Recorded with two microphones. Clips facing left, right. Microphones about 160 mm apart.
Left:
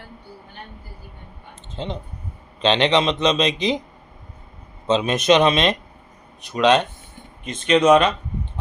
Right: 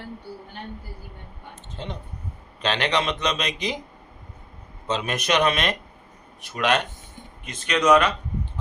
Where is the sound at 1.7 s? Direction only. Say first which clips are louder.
Left 6 dB; 30° left (ahead or behind).